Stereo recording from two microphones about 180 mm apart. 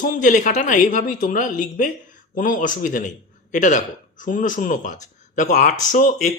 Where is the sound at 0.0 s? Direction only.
45° left (ahead or behind).